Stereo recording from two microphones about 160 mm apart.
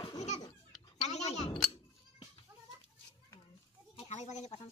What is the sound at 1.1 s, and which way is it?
Chink, 45° left (ahead or behind).